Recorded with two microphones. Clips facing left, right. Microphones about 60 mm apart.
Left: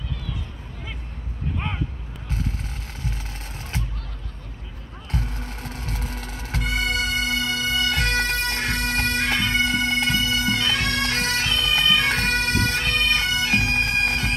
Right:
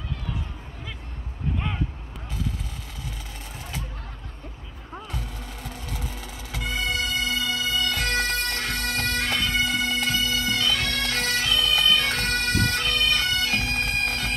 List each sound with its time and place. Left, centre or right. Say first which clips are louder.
5.1 s bagpipes: left 5 dB; left
10.5 s bagpipes: left 2 dB; left
10.8 s bagpipes: left 3 dB; left
13.7 s bagpipes: left 4 dB; left